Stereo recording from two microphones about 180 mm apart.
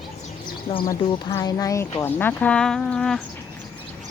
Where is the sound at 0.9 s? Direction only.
20° left (ahead or behind); by 3.2 s 5° left (ahead or behind).